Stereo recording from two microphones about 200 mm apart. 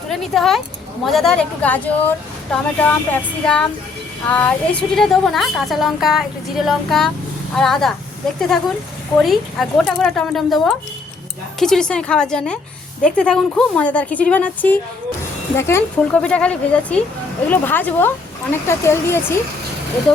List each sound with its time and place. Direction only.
0.1 s a woman's voice: centre (ahead or behind)